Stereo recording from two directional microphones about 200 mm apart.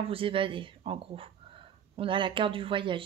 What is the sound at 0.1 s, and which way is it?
Speech, 25° right (ahead or behind).